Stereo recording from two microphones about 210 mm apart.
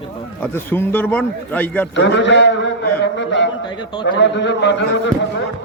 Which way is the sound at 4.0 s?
60° left (ahead or behind).